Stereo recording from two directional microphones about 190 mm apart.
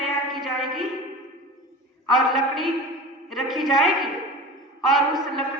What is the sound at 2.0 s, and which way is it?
A woman's voice, centre (ahead or behind).